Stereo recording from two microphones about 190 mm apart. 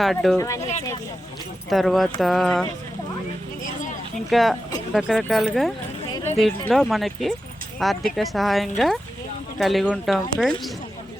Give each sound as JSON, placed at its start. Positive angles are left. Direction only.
{"t": 0.0, "sound": "speech", "side_deg": 0}
{"t": 0.3, "sound": "speech", "side_deg": 15}
{"t": 1.7, "sound": "speech", "side_deg": 0}
{"t": 4.3, "sound": "speech", "side_deg": 0}